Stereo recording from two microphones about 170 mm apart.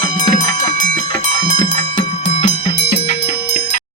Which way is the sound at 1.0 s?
25° left (ahead or behind).